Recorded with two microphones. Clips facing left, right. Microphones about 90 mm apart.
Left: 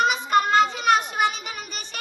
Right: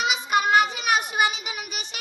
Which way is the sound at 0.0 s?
10° right (ahead or behind).